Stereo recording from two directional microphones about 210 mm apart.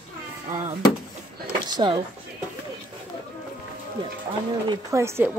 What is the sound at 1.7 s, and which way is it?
Speech, 20° right (ahead or behind).